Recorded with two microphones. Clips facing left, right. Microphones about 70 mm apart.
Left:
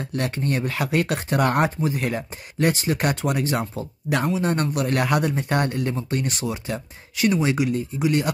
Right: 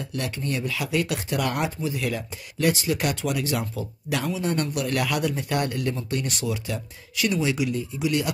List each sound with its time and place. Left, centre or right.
0.0 s speech: left